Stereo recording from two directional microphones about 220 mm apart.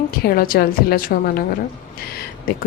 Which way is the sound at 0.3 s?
40° left (ahead or behind).